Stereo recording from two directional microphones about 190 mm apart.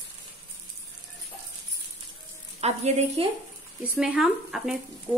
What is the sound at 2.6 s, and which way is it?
Speech, 35° right (ahead or behind).